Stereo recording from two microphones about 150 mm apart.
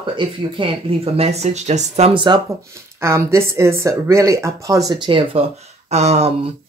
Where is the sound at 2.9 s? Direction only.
20° right (ahead or behind).